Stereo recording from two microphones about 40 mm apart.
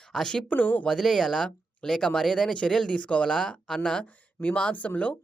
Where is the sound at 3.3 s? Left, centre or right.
Centre.